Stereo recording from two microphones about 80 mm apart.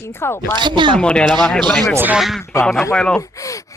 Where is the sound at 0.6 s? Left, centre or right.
Right.